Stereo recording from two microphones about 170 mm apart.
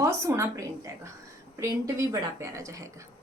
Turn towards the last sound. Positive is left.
turn(degrees=-20)  # may be behind; listen again after turning